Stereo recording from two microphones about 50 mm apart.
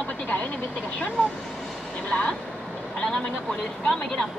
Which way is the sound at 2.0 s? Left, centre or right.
Left.